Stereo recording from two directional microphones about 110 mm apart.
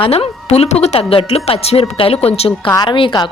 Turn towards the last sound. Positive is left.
turn(degrees=45)  # may be behind; listen again after turning